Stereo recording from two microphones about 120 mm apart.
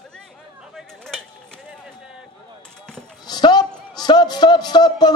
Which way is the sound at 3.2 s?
35° left (ahead or behind).